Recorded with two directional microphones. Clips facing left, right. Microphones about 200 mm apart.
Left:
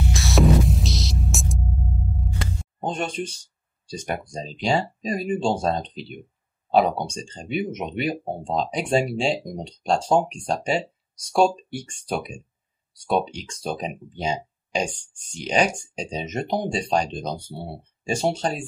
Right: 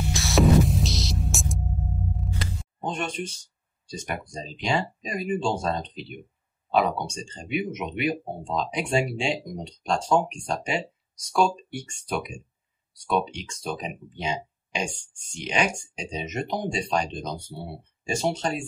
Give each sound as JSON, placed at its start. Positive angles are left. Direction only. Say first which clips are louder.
{"t": 0.1, "sound": "hum", "louder": "even", "side_deg": 0}
{"t": 2.8, "sound": "a sound", "louder": "left 3 dB", "side_deg": 35}
{"t": 3.8, "sound": "speech", "louder": "left 3 dB", "side_deg": 35}